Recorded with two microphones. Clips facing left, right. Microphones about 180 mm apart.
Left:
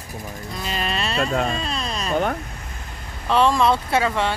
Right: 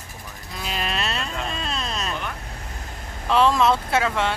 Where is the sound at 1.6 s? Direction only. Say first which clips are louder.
Left 2 dB; centre (ahead or behind).